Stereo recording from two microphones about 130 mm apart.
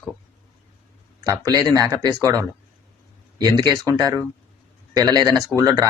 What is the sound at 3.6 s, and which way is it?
Speech, 30° right (ahead or behind).